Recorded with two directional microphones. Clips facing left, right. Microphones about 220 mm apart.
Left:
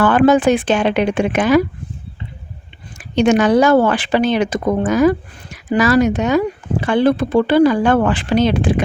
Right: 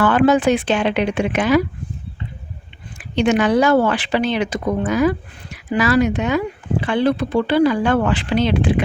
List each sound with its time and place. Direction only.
0.0 s speech: 45° left (ahead or behind)
3.0 s speech: 45° left (ahead or behind)